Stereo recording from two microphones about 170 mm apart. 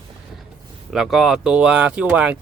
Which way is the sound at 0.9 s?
Centre (ahead or behind).